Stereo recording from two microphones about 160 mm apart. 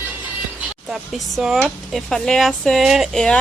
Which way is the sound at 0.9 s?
Centre (ahead or behind).